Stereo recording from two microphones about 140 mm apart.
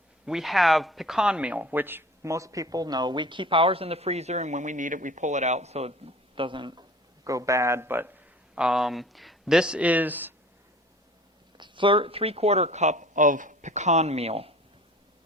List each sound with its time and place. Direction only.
0.3 s speech: centre (ahead or behind); by 5.9 s 50° right (ahead or behind)
6.3 s speech: 35° right (ahead or behind)
7.3 s speech: 25° right (ahead or behind)
8.5 s speech: 5° right (ahead or behind)
11.5 s speech: 35° right (ahead or behind)